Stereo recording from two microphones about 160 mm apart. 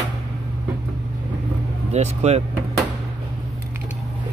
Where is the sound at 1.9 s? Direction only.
45° right (ahead or behind).